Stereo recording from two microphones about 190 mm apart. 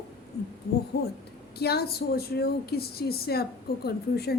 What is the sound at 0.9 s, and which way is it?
A woman's voice, 55° left (ahead or behind).